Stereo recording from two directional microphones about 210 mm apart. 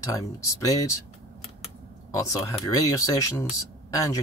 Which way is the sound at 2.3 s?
15° left (ahead or behind).